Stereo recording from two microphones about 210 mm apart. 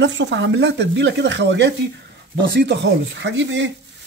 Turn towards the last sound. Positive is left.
turn(degrees=-60)  # may be behind; listen again after turning